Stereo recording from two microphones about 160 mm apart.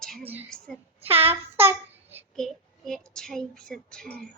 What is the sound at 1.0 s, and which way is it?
Child singing, 35° right (ahead or behind).